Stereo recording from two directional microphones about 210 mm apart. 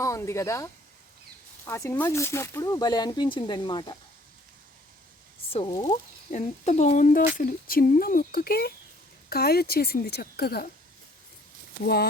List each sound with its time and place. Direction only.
0.0 s speech: 15° left (ahead or behind)
5.5 s speech: 25° left (ahead or behind)
5.9 s speech: 30° left (ahead or behind); by 10.7 s 50° left (ahead or behind)
11.8 s speech: 50° left (ahead or behind)